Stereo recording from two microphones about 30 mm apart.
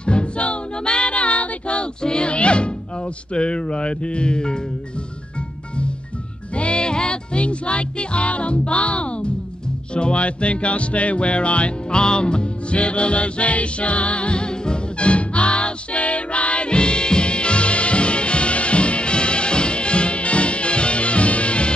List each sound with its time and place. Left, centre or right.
0.0 s music: left
3.3 s speech: left
6.5 s music: left